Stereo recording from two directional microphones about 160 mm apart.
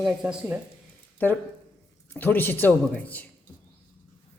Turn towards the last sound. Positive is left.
turn(degrees=10)  # may be behind; listen again after turning